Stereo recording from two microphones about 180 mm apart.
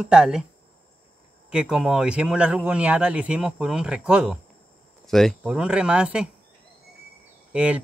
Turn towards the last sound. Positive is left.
turn(degrees=-5)  # may be behind; listen again after turning